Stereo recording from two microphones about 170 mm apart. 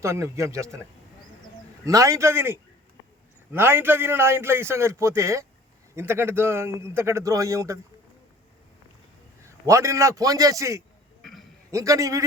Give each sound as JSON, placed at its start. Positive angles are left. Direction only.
{"t": 0.0, "sound": "a man's voice", "side_deg": -15}
{"t": 1.8, "sound": "a man's voice", "side_deg": -20}
{"t": 9.4, "sound": "a man's voice", "side_deg": -15}
{"t": 11.2, "sound": "a sound", "side_deg": 0}
{"t": 11.7, "sound": "a man's voice", "side_deg": -20}